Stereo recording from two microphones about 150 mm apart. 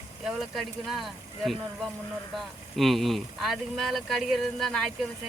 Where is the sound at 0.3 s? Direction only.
Centre (ahead or behind).